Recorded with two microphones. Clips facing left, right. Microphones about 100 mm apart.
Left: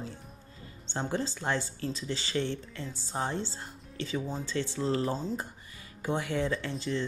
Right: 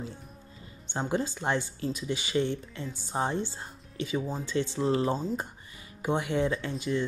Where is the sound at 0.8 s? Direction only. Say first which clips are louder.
Right 2 dB; 15° right (ahead or behind).